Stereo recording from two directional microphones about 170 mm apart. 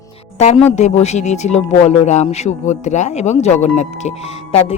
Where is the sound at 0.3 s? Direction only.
40° left (ahead or behind).